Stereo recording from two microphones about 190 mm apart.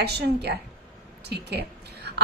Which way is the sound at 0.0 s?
60° right (ahead or behind).